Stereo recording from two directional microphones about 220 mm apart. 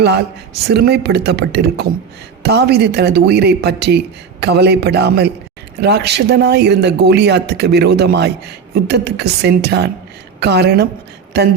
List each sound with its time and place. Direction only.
0.0 s a man's voice: 50° right (ahead or behind)